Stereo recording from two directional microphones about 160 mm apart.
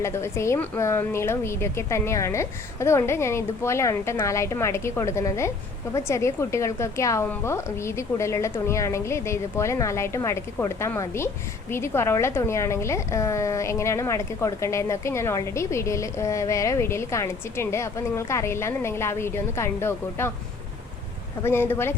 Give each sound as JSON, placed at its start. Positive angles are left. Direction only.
{"t": 0.0, "sound": "a woman's voice", "side_deg": 15}
{"t": 21.4, "sound": "a woman's voice", "side_deg": 15}